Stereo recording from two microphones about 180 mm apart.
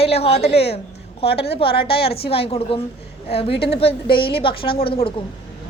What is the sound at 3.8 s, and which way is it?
A woman's voice, 30° left (ahead or behind).